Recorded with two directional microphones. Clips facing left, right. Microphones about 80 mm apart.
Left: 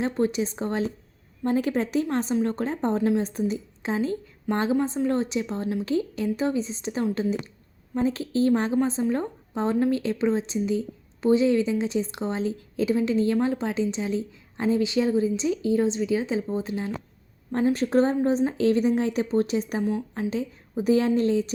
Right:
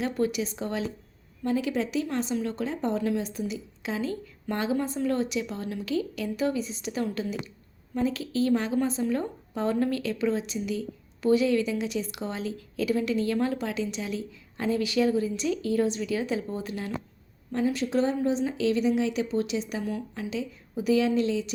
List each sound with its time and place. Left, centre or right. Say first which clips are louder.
0.0 s a woman's voice: left 3 dB; left
17.5 s a woman's voice: left 4 dB; left
19.8 s a woman's voice: left 5 dB; left
20.3 s a woman's voice: left 3 dB; left